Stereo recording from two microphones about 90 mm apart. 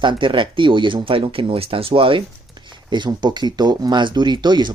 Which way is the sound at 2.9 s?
55° right (ahead or behind).